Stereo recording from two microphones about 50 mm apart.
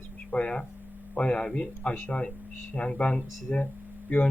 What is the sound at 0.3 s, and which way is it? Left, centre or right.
Speech, centre.